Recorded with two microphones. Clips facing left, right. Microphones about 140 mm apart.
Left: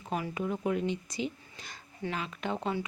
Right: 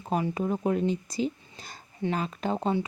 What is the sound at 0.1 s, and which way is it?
A woman's voice, 35° right (ahead or behind).